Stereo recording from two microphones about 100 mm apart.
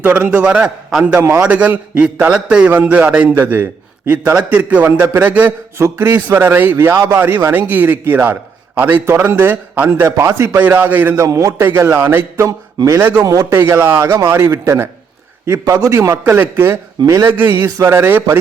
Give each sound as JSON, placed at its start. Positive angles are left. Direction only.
{"t": 0.0, "sound": "a man's voice", "side_deg": -20}
{"t": 11.2, "sound": "a man's voice", "side_deg": -35}
{"t": 11.6, "sound": "a man's voice", "side_deg": -25}
{"t": 13.0, "sound": "a man's voice", "side_deg": -20}
{"t": 13.2, "sound": "a man's voice", "side_deg": -40}
{"t": 13.5, "sound": "a man's voice", "side_deg": -25}
{"t": 17.0, "sound": "a man's voice", "side_deg": -35}
{"t": 17.2, "sound": "a man's voice", "side_deg": -20}